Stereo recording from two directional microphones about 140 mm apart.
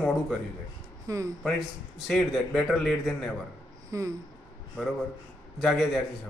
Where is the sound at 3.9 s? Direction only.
25° right (ahead or behind).